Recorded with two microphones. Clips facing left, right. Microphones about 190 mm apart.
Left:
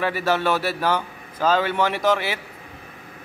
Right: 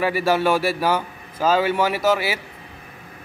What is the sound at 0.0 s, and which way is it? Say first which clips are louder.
A man's voice: right 3 dB; 10° right (ahead or behind).